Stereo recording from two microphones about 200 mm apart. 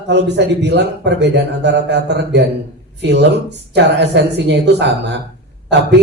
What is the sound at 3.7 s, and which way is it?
A man's voice, 60° right (ahead or behind).